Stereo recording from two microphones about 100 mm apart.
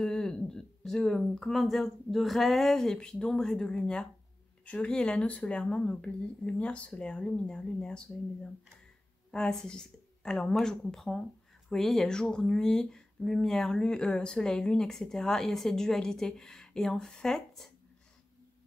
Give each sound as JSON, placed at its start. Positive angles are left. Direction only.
{"t": 0.0, "sound": "speech", "side_deg": 5}
{"t": 9.3, "sound": "speech", "side_deg": 5}